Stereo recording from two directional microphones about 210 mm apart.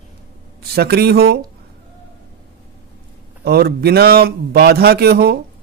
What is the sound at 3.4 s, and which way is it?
A man's voice, 50° right (ahead or behind).